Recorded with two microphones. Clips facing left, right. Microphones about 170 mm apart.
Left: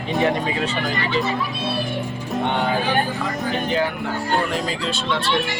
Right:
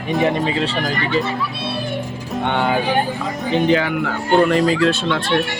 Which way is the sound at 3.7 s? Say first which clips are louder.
Right 4 dB; 90° right.